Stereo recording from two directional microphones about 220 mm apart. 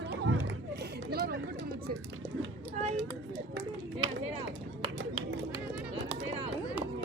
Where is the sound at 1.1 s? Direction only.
45° right (ahead or behind).